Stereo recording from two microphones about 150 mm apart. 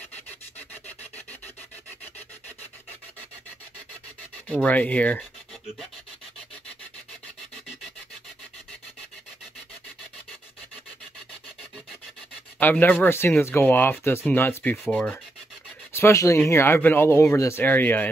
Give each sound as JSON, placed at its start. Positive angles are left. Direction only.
{"t": 4.6, "sound": "speech", "side_deg": 10}
{"t": 12.5, "sound": "speech", "side_deg": 10}